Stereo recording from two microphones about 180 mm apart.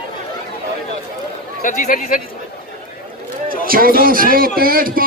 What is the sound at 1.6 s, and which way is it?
Speech, 45° left (ahead or behind).